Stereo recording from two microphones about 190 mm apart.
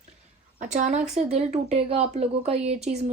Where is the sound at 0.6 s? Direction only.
40° right (ahead or behind).